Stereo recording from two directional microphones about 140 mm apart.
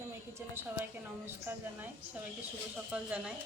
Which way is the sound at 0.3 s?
15° right (ahead or behind).